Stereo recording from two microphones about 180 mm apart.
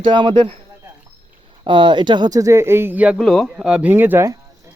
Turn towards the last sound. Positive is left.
turn(degrees=-15)  # may be behind; listen again after turning